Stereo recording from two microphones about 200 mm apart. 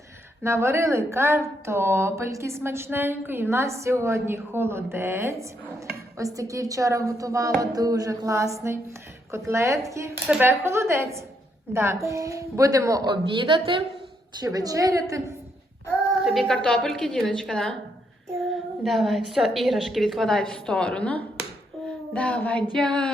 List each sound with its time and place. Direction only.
0.4 s speech: 15° right (ahead or behind)
16.2 s a woman's voice: centre (ahead or behind)